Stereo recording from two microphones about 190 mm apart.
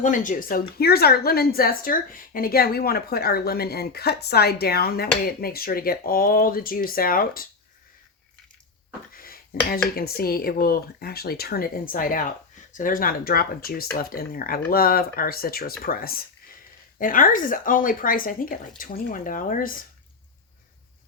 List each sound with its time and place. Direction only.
0.0 s speech: 45° left (ahead or behind)
9.1 s a sound: 50° left (ahead or behind)
9.9 s speech: 55° left (ahead or behind)